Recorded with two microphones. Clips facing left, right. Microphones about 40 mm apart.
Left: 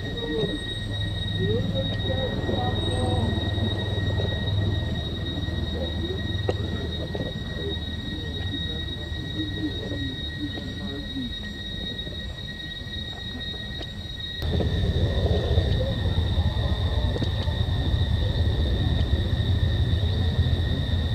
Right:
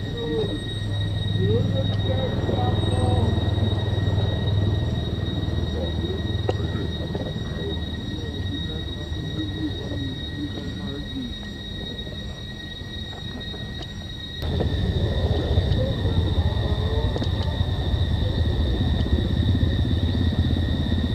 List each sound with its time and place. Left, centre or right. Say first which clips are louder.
2.2 s train: right 2 dB; right
2.7 s music: right 2 dB; centre
3.0 s music: right 2 dB; right
15.7 s a sound: right 3 dB; centre